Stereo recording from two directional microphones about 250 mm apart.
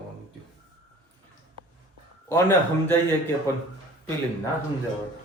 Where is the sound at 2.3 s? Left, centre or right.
Centre.